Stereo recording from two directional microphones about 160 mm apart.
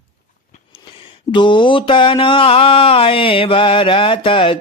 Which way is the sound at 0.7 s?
30° left (ahead or behind).